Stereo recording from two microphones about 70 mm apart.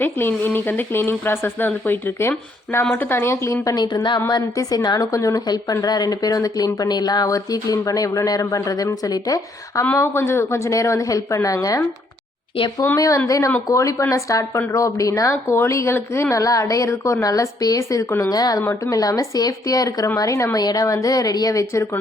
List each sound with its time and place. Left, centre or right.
0.0 s speech: left
3.8 s speech: left
4.5 s speech: left
5.7 s speech: left
9.9 s a woman's voice: left
13.0 s a woman's voice: left
16.3 s a woman's voice: left
20.6 s speech: left